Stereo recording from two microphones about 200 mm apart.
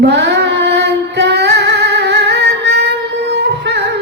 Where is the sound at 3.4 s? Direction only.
55° right (ahead or behind).